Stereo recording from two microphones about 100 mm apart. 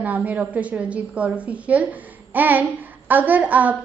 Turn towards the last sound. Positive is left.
turn(degrees=-15)  # may be behind; listen again after turning